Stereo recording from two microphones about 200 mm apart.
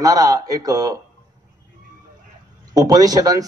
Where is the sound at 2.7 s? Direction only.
20° right (ahead or behind).